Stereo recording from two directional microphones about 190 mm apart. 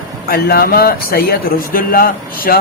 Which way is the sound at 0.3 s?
55° left (ahead or behind).